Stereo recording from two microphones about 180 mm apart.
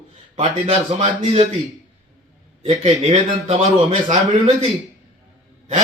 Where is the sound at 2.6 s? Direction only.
35° right (ahead or behind).